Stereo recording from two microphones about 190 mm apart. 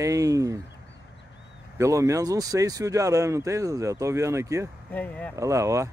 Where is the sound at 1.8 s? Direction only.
15° right (ahead or behind).